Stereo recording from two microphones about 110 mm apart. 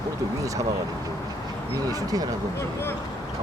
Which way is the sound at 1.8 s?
35° right (ahead or behind).